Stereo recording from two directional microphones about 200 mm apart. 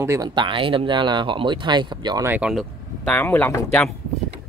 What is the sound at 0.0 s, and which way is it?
Speech, 15° right (ahead or behind).